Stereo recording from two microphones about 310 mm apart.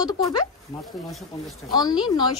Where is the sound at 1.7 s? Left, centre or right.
Centre.